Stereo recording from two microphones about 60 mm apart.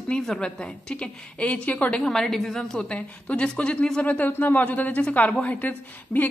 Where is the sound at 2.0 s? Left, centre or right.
Centre; by 6.3 s left.